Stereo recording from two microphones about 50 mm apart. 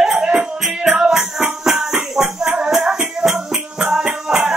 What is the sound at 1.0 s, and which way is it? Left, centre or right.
Music, centre.